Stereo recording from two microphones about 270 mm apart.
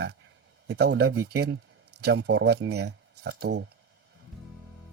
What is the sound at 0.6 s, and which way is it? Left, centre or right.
Speech, right.